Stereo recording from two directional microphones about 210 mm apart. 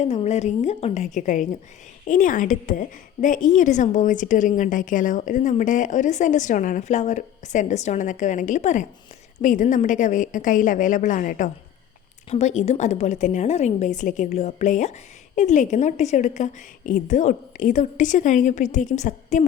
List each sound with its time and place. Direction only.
0.0 s a woman's voice: 30° left (ahead or behind)